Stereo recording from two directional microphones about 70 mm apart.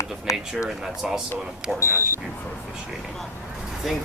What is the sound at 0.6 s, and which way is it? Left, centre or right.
Speech, centre.